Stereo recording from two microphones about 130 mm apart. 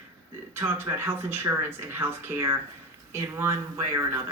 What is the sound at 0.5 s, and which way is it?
Speech, 20° right (ahead or behind).